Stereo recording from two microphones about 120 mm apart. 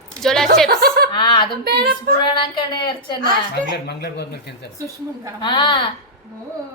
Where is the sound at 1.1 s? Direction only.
40° left (ahead or behind).